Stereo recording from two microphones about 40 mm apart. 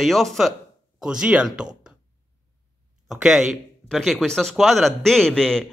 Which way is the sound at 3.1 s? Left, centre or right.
Centre.